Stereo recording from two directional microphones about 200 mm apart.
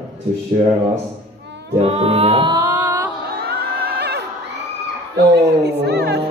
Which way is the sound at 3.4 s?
50° right (ahead or behind).